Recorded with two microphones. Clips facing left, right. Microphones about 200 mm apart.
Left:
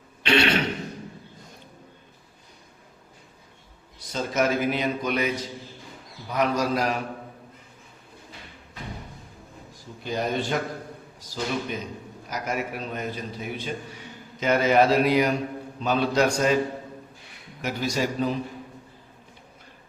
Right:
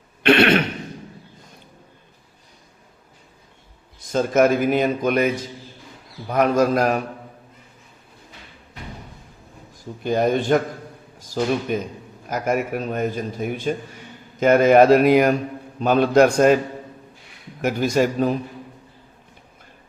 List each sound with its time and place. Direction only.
0.2 s throat clearing: 60° right (ahead or behind)
4.0 s a man's voice: 50° right (ahead or behind)
10.0 s a man's voice: 50° right (ahead or behind)
17.6 s a man's voice: 50° right (ahead or behind)